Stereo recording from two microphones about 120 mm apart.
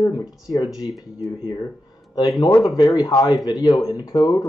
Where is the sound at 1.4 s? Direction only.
35° left (ahead or behind).